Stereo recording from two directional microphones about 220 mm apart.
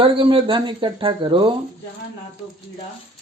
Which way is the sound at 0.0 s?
25° right (ahead or behind).